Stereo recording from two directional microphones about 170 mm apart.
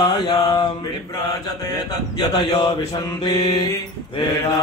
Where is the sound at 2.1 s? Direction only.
25° left (ahead or behind).